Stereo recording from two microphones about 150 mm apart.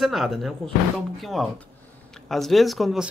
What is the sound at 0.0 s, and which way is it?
Speech, centre (ahead or behind).